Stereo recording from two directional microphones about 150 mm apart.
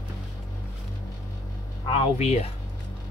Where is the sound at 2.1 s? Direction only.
45° left (ahead or behind).